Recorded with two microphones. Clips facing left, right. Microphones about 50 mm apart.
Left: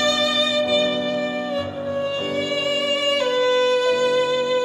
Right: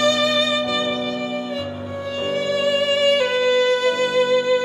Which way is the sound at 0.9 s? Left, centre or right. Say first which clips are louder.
Left 1 dB; left.